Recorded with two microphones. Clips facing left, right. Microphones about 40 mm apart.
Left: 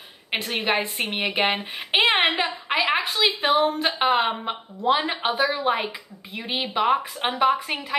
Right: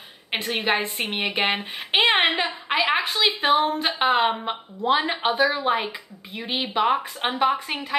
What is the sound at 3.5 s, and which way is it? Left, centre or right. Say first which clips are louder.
Speech: right 1 dB; right.